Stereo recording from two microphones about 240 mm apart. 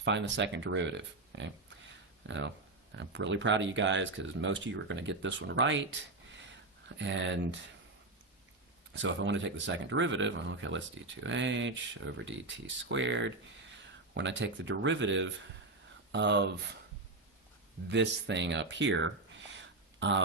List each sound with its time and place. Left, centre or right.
0.0 s speech: right
8.9 s speech: right
17.8 s speech: right
19.5 s a sound: right